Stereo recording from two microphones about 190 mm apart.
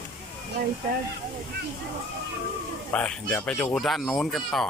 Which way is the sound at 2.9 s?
5° left (ahead or behind).